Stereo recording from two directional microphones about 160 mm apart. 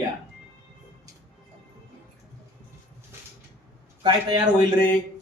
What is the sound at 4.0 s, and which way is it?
Speech, 30° right (ahead or behind).